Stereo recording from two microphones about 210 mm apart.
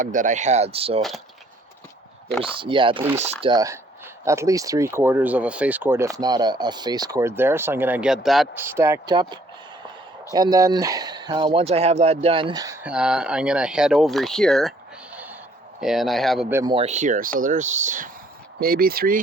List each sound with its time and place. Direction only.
0.0 s speech: 35° right (ahead or behind)
2.4 s speech: 25° right (ahead or behind)
12.8 s speech: 5° right (ahead or behind)
15.8 s speech: centre (ahead or behind)
16.5 s speech: 15° right (ahead or behind)
16.7 s speech: 30° right (ahead or behind)